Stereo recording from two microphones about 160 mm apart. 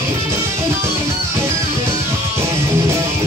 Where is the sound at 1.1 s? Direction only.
15° right (ahead or behind).